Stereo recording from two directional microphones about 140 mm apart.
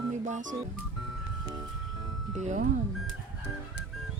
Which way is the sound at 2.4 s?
65° right (ahead or behind).